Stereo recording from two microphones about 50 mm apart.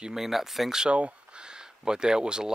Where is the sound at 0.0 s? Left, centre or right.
Centre.